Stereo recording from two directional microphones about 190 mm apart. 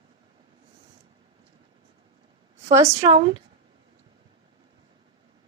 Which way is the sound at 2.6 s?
35° right (ahead or behind).